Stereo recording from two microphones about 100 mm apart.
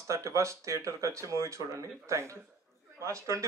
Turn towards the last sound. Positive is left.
turn(degrees=-30)  # may be behind; listen again after turning